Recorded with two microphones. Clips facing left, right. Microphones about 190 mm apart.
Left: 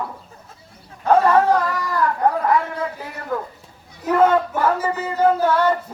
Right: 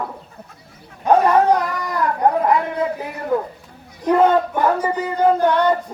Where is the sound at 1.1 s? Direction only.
15° right (ahead or behind).